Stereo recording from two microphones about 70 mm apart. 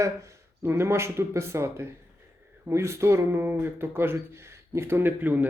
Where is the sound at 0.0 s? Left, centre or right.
Right.